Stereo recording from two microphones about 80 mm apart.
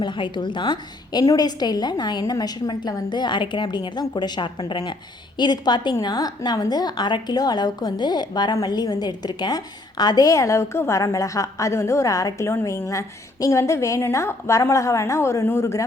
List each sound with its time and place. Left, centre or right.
0.0 s a woman's voice: left
1.2 s a woman's voice: left
1.5 s a woman's voice: left
5.4 s a woman's voice: left